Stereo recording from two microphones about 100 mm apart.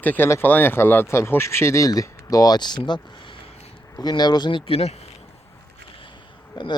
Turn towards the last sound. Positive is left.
turn(degrees=50)  # may be behind; listen again after turning